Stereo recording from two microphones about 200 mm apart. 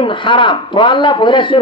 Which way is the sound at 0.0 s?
25° left (ahead or behind).